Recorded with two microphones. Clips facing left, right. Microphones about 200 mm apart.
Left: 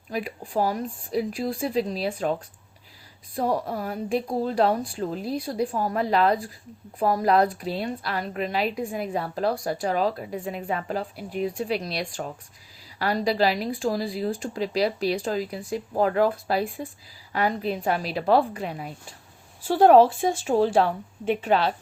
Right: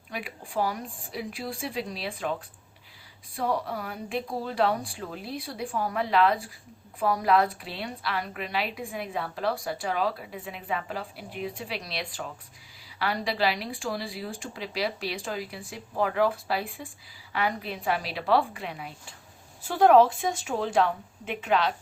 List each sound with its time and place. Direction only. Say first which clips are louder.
0.1 s a woman's voice: left 6 dB; 40° left (ahead or behind)
3.3 s a woman's voice: left 3 dB; 40° left (ahead or behind)
19.6 s speech: left 3 dB; 30° left (ahead or behind)